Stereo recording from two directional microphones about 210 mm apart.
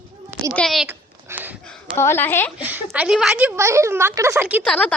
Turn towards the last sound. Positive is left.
turn(degrees=5)  # may be behind; listen again after turning